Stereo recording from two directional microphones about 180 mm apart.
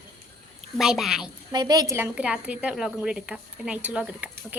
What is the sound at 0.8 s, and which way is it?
Speech, 5° right (ahead or behind).